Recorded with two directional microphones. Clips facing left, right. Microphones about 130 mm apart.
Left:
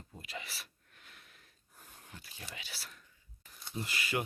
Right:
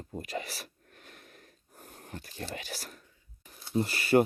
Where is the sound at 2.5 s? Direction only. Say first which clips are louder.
Right 9 dB; 45° right (ahead or behind).